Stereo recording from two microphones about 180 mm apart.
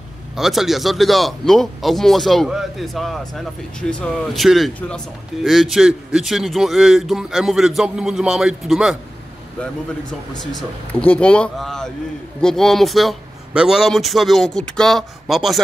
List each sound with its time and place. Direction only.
0.4 s a man's voice: centre (ahead or behind)
10.3 s a man's voice: centre (ahead or behind)